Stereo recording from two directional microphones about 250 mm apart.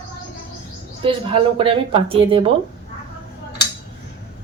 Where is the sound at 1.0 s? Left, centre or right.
Right.